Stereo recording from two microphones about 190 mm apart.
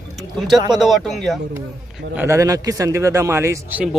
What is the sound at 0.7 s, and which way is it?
Speech, centre (ahead or behind).